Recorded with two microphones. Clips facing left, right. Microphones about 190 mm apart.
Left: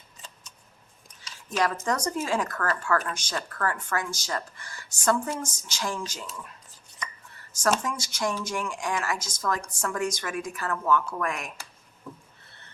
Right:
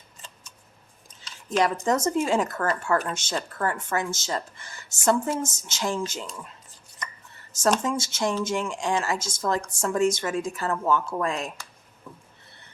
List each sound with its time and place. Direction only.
1.5 s speech: 20° right (ahead or behind)
7.8 s speech: 25° right (ahead or behind)